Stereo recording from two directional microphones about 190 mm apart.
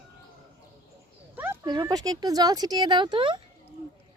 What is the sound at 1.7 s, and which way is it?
Speech, 20° right (ahead or behind).